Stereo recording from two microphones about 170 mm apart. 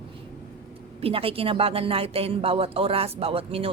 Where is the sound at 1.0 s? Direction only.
35° right (ahead or behind).